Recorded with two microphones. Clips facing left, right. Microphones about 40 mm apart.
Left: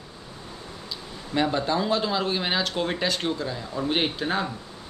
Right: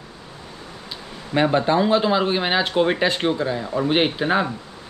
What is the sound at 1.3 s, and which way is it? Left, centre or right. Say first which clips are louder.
Speech: right 6 dB; right.